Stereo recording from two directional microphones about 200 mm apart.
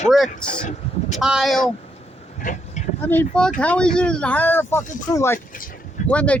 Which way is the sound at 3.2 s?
5° left (ahead or behind).